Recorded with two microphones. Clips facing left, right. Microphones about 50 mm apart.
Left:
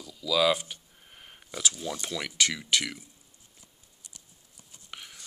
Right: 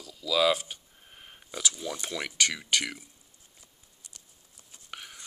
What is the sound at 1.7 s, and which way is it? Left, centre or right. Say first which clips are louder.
Speech: left 1 dB; centre.